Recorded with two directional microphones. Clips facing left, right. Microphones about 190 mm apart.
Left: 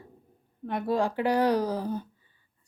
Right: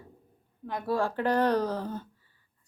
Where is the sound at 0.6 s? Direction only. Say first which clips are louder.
Left 2 dB; 20° left (ahead or behind).